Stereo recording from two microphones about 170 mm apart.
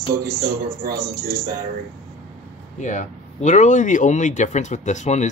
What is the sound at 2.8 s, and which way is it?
Speech, 45° left (ahead or behind).